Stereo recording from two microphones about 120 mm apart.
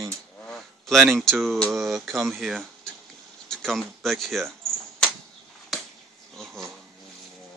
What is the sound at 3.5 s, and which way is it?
Speech, centre (ahead or behind).